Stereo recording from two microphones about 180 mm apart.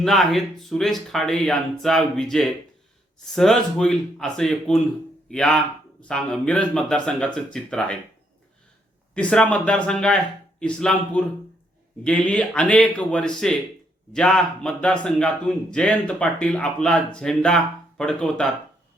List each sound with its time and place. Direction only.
0.0 s a man's voice: centre (ahead or behind)
9.1 s a man's voice: 5° left (ahead or behind)